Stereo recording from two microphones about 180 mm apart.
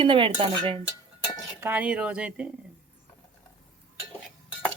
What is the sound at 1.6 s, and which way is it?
Speech, 5° right (ahead or behind).